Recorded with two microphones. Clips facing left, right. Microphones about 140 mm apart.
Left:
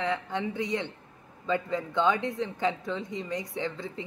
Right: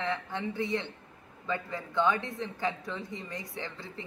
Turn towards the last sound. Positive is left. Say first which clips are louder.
# left 7 dB
turn(degrees=20)  # may be behind; listen again after turning